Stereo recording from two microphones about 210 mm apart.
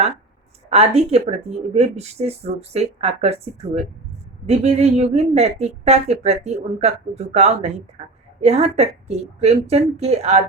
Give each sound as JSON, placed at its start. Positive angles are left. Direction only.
{"t": 0.7, "sound": "a woman's voice", "side_deg": -30}